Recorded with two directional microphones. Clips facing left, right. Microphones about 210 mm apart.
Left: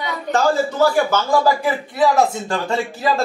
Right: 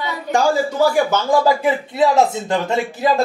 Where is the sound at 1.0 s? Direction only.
20° right (ahead or behind).